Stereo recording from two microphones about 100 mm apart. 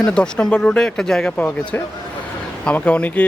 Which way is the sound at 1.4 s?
15° left (ahead or behind).